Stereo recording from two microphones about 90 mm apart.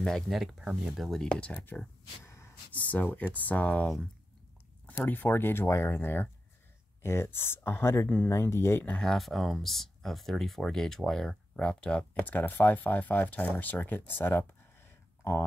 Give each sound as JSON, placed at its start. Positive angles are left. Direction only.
{"t": 0.0, "sound": "speech", "side_deg": 0}
{"t": 1.3, "sound": "speech", "side_deg": 15}
{"t": 2.2, "sound": "gasp", "side_deg": 30}
{"t": 2.7, "sound": "speech", "side_deg": 15}
{"t": 5.0, "sound": "speech", "side_deg": 20}
{"t": 8.9, "sound": "speech", "side_deg": 0}